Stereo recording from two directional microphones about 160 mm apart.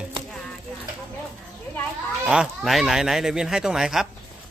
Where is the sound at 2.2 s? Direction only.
5° right (ahead or behind).